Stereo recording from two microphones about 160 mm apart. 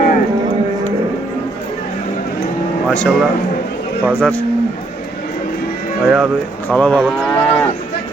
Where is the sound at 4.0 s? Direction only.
10° left (ahead or behind).